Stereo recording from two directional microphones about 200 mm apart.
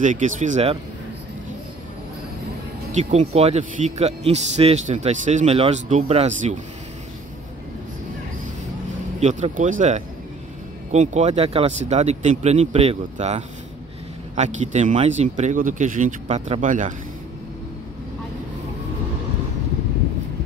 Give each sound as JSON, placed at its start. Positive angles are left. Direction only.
{"t": 0.0, "sound": "a man's voice", "side_deg": -40}
{"t": 2.9, "sound": "a man's voice", "side_deg": -35}
{"t": 9.2, "sound": "a man's voice", "side_deg": -35}